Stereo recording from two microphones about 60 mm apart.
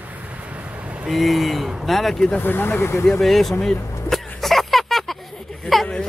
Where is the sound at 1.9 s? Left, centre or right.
Centre.